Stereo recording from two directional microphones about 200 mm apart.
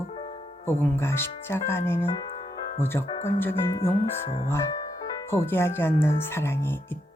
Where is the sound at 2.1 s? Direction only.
30° left (ahead or behind).